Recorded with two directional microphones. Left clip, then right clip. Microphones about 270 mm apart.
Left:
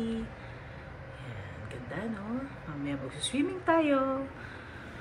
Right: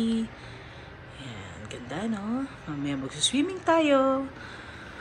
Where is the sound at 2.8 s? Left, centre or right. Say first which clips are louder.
Right 8 dB; centre.